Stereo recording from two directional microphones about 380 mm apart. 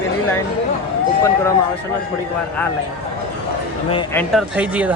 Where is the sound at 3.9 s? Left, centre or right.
Centre.